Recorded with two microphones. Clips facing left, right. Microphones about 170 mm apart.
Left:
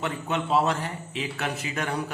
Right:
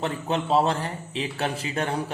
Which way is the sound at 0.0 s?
35° right (ahead or behind).